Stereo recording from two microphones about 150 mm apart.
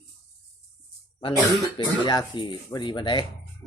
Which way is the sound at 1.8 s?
30° left (ahead or behind).